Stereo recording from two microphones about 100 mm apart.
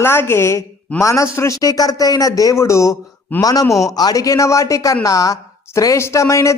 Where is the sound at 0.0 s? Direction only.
25° left (ahead or behind).